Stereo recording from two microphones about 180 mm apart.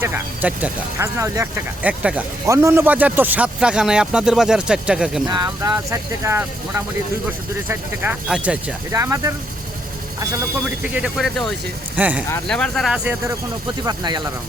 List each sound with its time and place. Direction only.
0.0 s speech: 10° right (ahead or behind)
5.3 s speech: 20° right (ahead or behind)
10.7 s speech: 5° right (ahead or behind)
12.5 s speech: 5° left (ahead or behind)
13.8 s speech: 25° right (ahead or behind)